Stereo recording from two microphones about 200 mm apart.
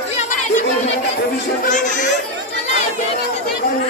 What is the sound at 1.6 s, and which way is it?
Speech, 40° left (ahead or behind).